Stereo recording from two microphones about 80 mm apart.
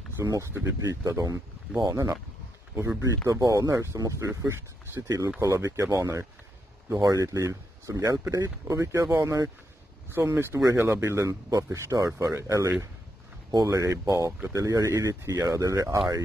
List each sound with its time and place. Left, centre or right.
0.2 s speech: right
10.0 s speech: right